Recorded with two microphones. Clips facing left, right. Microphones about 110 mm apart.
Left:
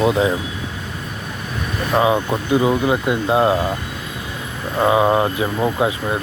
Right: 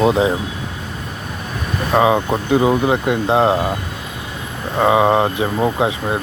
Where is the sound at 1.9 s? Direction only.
30° right (ahead or behind).